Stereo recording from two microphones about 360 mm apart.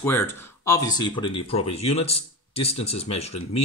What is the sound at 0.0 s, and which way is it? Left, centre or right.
Speech, centre.